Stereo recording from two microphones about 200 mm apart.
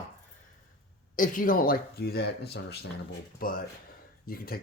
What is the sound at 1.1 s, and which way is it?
Speech, 40° left (ahead or behind).